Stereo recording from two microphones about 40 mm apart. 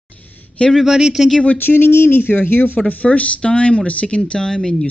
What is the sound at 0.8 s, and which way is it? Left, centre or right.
Speech, centre.